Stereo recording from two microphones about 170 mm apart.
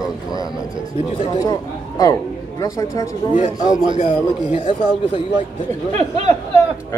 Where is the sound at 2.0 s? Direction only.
20° left (ahead or behind).